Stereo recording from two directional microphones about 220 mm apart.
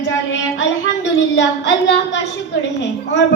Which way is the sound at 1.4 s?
55° left (ahead or behind).